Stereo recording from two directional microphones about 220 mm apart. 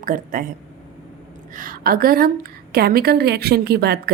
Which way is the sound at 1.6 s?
40° right (ahead or behind).